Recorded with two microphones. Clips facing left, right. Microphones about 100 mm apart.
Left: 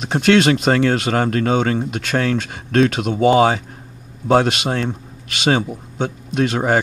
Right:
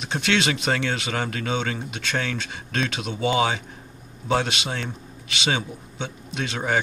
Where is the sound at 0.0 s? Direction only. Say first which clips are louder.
Left 9 dB; 50° left (ahead or behind).